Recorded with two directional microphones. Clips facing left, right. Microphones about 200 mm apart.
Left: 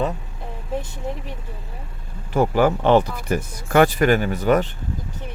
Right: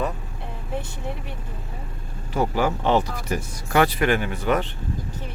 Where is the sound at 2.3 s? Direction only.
55° left (ahead or behind).